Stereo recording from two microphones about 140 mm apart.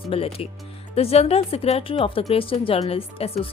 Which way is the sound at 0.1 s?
45° left (ahead or behind).